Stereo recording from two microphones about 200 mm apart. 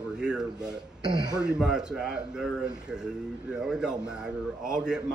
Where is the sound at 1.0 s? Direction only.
20° right (ahead or behind).